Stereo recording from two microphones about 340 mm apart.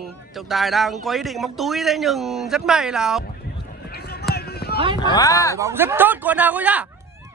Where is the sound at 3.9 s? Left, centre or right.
Left.